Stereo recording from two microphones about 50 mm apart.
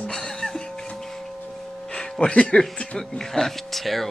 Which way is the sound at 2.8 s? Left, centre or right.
Centre.